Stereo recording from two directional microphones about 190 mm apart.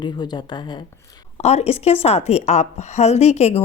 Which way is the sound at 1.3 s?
35° left (ahead or behind).